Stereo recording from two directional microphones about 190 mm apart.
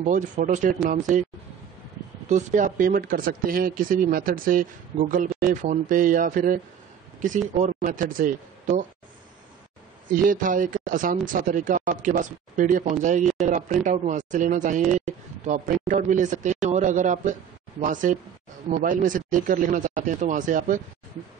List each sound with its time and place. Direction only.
0.0 s speech: 40° right (ahead or behind)
2.2 s speech: 40° right (ahead or behind)
10.1 s speech: 45° right (ahead or behind)